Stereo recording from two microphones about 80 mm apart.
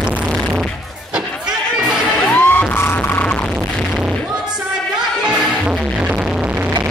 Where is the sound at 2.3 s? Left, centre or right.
Left.